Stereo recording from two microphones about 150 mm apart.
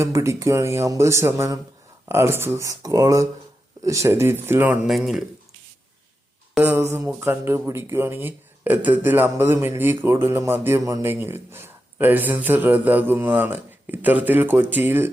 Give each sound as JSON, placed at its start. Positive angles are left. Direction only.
{"t": 0.0, "sound": "a man's voice", "side_deg": -20}
{"t": 4.9, "sound": "speech", "side_deg": 0}
{"t": 6.6, "sound": "speech", "side_deg": -20}